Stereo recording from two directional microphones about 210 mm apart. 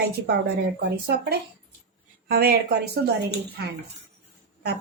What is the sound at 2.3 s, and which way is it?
Speech, 45° right (ahead or behind).